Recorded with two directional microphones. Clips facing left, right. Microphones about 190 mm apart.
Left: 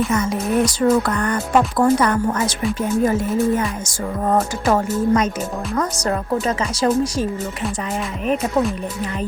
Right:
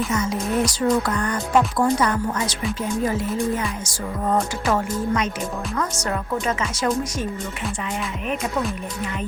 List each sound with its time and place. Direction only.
0.1 s speech: 55° left (ahead or behind)
3.0 s music: 50° left (ahead or behind)
5.7 s speech: 40° left (ahead or behind)